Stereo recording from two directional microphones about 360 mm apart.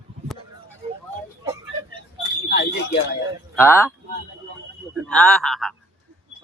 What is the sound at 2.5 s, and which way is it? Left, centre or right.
Smoke detector, left.